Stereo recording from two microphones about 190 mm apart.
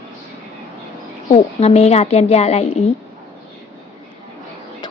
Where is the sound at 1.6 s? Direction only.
35° left (ahead or behind).